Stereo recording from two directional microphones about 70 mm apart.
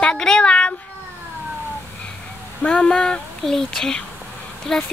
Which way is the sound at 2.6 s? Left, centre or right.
Centre.